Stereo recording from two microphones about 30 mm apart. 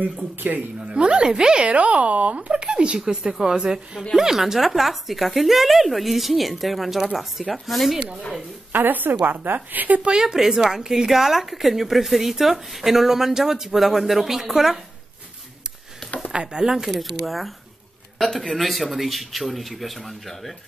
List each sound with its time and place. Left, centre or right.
0.7 s a woman's voice: right
1.7 s speech: right
3.3 s a woman's voice: centre
8.7 s a woman's voice: right
10.2 s speech: centre
11.1 s speech: centre
16.3 s a woman's voice: right
17.0 s speech: centre
18.5 s speech: centre